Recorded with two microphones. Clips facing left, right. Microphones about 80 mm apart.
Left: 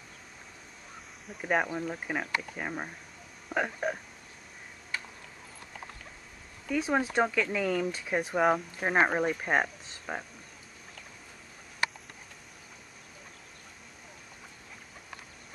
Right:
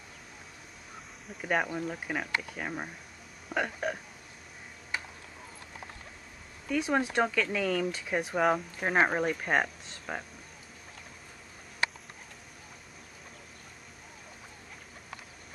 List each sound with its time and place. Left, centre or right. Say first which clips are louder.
1.4 s speech: left 1 dB; centre
3.4 s hiccup: left 1 dB; centre
4.9 s tick-tock: right 1 dB; centre
6.7 s speech: even; centre